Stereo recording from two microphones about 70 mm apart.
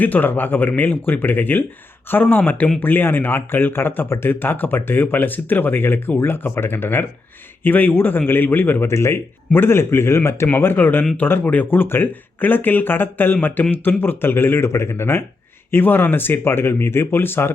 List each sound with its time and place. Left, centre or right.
0.0 s speech: left
8.9 s speech: left